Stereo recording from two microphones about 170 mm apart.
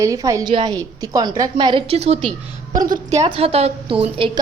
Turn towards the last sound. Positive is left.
turn(degrees=-30)  # may be behind; listen again after turning